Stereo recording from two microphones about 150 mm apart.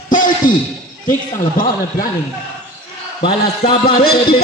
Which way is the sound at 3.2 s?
35° left (ahead or behind).